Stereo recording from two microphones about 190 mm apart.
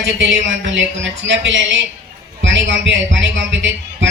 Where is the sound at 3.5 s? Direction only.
70° right (ahead or behind).